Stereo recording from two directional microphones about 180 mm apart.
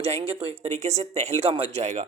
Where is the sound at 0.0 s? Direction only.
30° right (ahead or behind).